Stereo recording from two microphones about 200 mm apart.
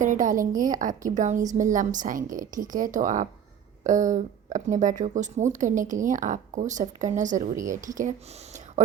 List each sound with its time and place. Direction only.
0.0 s a woman's voice: 40° right (ahead or behind)